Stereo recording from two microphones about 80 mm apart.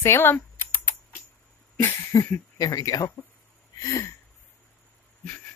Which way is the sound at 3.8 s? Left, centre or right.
Left.